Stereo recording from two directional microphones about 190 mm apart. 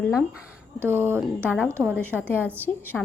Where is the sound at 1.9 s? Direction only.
10° left (ahead or behind).